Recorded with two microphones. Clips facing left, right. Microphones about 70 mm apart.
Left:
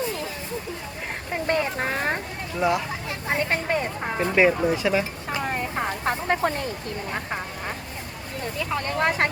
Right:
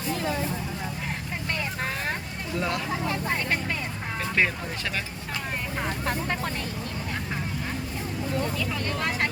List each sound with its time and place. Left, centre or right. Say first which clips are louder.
1.5 s vehicle: left 7 dB; left
2.6 s speech: left 5 dB; centre
3.5 s speech: left 5 dB; left
4.4 s speech: left 8 dB; centre
6.1 s speech: left 8 dB; left
8.7 s speech: left 5 dB; left